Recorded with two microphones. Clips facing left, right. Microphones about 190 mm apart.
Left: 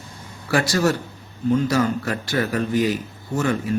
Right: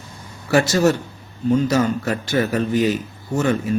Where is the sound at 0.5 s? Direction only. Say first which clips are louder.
Right 4 dB; 20° right (ahead or behind).